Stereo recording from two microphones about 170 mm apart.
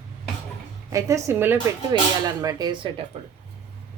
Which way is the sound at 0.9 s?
15° right (ahead or behind).